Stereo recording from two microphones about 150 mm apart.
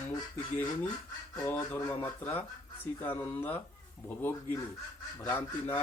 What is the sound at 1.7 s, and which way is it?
Speech, 25° left (ahead or behind).